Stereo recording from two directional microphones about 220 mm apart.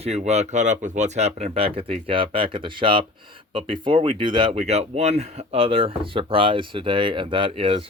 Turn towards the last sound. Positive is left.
turn(degrees=-25)  # may be behind; listen again after turning